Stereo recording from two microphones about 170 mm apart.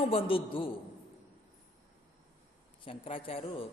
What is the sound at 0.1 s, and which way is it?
Speech, 30° left (ahead or behind).